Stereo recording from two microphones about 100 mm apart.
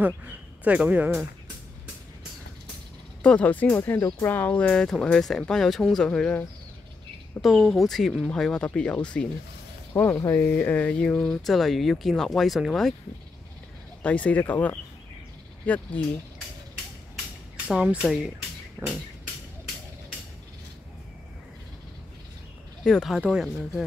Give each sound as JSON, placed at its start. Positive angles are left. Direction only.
{"t": 0.7, "sound": "speech", "side_deg": -15}
{"t": 3.2, "sound": "speech", "side_deg": 10}
{"t": 7.4, "sound": "speech", "side_deg": 0}
{"t": 9.9, "sound": "speech", "side_deg": 25}
{"t": 14.0, "sound": "speech", "side_deg": 15}
{"t": 17.6, "sound": "speech", "side_deg": -10}
{"t": 18.8, "sound": "a sound", "side_deg": -40}
{"t": 22.8, "sound": "speech", "side_deg": 5}